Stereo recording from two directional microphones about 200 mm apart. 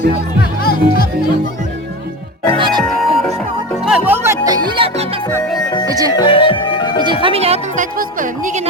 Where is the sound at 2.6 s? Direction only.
20° right (ahead or behind).